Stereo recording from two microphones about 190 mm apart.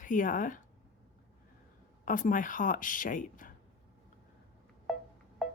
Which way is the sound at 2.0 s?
45° left (ahead or behind).